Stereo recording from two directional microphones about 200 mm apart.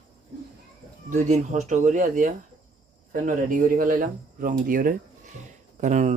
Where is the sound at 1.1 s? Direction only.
35° right (ahead or behind).